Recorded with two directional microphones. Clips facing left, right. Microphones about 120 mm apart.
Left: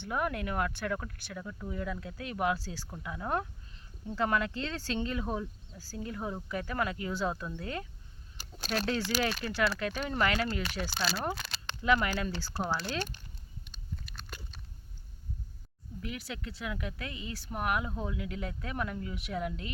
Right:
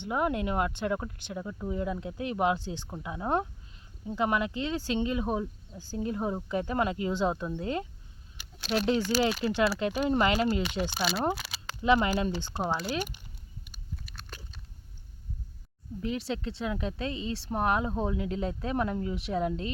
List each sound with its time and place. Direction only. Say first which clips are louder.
0.0 s speech: right 4 dB; 20° right (ahead or behind)
8.4 s a sound: left 1 dB; 45° left (ahead or behind)
8.9 s speech: right 6 dB; 15° right (ahead or behind)
11.0 s speech: right 4 dB; centre (ahead or behind)
11.3 s a sound: even; 5° right (ahead or behind)
11.8 s speech: right 4 dB; 25° right (ahead or behind)
12.6 s speech: right 3 dB; 5° right (ahead or behind)
13.7 s biting: even; centre (ahead or behind)
16.0 s speech: right 8 dB; 30° right (ahead or behind)